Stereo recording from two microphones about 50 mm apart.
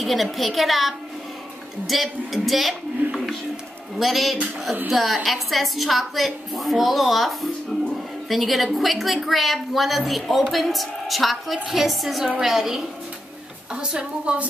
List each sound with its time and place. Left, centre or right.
0.0 s a woman's voice: centre
13.7 s a woman's voice: right